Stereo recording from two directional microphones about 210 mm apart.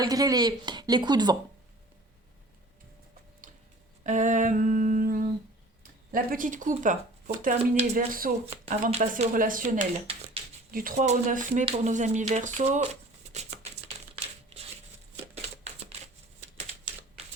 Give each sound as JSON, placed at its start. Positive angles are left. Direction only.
{"t": 0.0, "sound": "speech", "side_deg": -15}
{"t": 4.0, "sound": "speech", "side_deg": -35}
{"t": 8.4, "sound": "speech", "side_deg": -30}
{"t": 10.7, "sound": "speech", "side_deg": -40}
{"t": 15.4, "sound": "shuffling cards", "side_deg": -30}